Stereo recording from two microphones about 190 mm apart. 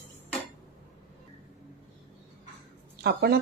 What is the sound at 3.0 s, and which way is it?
Speech, 55° right (ahead or behind).